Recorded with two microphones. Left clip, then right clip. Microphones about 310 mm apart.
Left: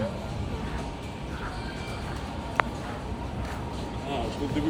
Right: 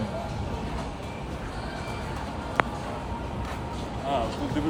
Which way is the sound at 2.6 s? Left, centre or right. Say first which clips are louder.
Right 1 dB; centre.